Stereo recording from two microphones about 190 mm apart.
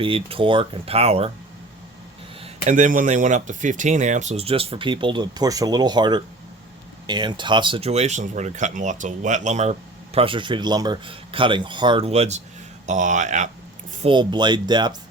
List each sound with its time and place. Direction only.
0.0 s speech: 30° right (ahead or behind)
2.4 s speech: 40° right (ahead or behind)
10.2 s speech: 25° right (ahead or behind)
14.1 s speech: 25° right (ahead or behind)